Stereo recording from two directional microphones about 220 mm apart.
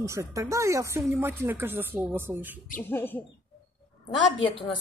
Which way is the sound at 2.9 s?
10° left (ahead or behind).